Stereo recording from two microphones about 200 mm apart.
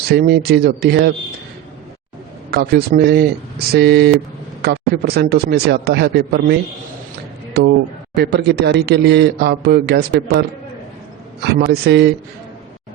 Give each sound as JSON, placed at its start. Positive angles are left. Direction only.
{"t": 0.0, "sound": "speech", "side_deg": -55}
{"t": 2.5, "sound": "speech", "side_deg": -50}
{"t": 11.4, "sound": "speech", "side_deg": -55}